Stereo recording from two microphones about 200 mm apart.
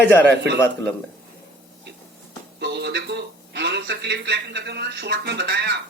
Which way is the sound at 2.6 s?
55° right (ahead or behind).